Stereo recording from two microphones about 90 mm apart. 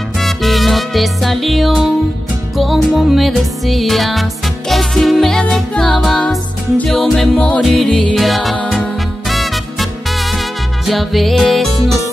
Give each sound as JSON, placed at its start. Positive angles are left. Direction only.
{"t": 0.2, "sound": "music", "side_deg": 0}
{"t": 10.9, "sound": "music", "side_deg": 0}